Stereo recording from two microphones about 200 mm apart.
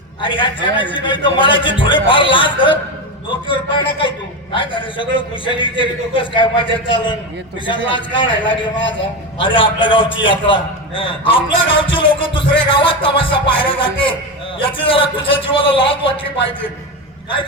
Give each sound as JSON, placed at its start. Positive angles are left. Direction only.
{"t": 0.2, "sound": "a man's voice", "side_deg": 25}